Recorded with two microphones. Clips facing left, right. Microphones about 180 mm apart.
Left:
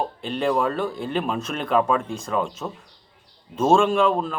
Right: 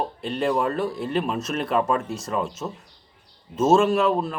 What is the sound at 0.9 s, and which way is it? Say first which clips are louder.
Speech: even; centre (ahead or behind).